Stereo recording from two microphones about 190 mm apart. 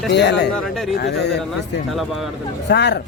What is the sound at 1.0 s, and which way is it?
Speech, 60° left (ahead or behind).